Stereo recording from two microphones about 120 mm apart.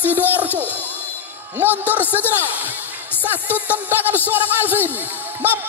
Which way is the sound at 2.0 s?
15° left (ahead or behind).